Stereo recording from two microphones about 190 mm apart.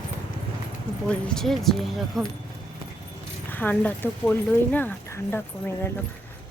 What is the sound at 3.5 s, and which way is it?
A woman's voice, 10° left (ahead or behind).